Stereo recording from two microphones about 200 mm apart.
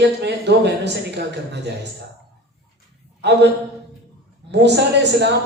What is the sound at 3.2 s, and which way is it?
Speech, 60° right (ahead or behind).